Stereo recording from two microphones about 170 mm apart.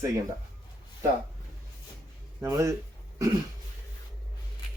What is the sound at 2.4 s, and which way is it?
Speech, 15° right (ahead or behind).